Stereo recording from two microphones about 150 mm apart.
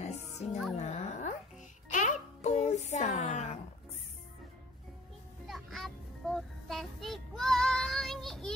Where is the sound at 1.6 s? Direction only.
55° left (ahead or behind).